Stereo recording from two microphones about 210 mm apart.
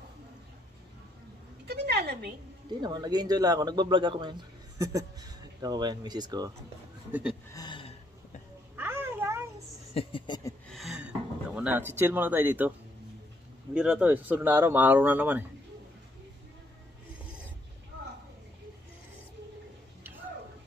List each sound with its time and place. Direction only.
1.7 s a sound: 50° right (ahead or behind)
2.8 s a man's voice: 20° right (ahead or behind)
7.1 s speech: 10° right (ahead or behind)
7.5 s gasp: 20° left (ahead or behind)
8.7 s a sound: 10° right (ahead or behind)
9.9 s speech: 25° left (ahead or behind)
10.7 s speech: centre (ahead or behind)
13.7 s speech: 5° right (ahead or behind)